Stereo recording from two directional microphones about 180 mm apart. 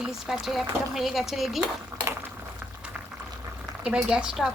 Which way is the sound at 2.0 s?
15° right (ahead or behind).